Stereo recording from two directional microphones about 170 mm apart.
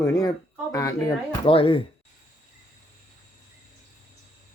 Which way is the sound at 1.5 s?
30° left (ahead or behind).